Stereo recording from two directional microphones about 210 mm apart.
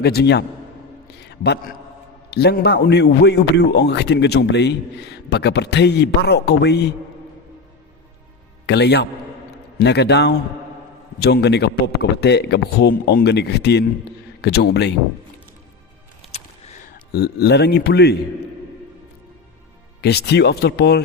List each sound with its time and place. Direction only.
0.0 s a man's voice: 50° left (ahead or behind)
1.0 s a sound: 50° left (ahead or behind)
2.3 s a man's voice: 50° left (ahead or behind)
8.6 s a man's voice: 55° left (ahead or behind)
17.1 s a man's voice: 50° left (ahead or behind)
20.0 s a man's voice: 50° left (ahead or behind)